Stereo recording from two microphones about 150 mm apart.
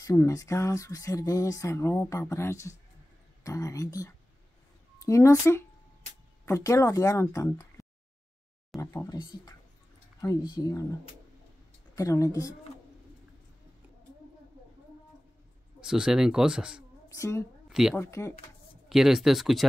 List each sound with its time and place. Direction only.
0.0 s speech: 25° left (ahead or behind)
8.9 s speech: 20° left (ahead or behind)
11.9 s speech: 20° left (ahead or behind)
15.8 s speech: 5° right (ahead or behind)
17.1 s speech: 20° left (ahead or behind)
17.6 s a sound: 5° right (ahead or behind)
17.9 s speech: 20° left (ahead or behind)
18.9 s speech: centre (ahead or behind)